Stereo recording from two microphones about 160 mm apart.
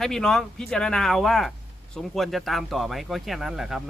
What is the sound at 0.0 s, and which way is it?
Speech, 5° left (ahead or behind).